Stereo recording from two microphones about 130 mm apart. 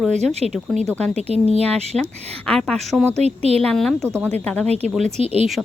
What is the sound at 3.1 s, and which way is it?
Speech, 55° right (ahead or behind).